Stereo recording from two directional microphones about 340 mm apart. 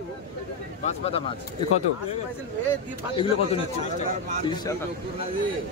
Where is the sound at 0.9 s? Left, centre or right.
Centre.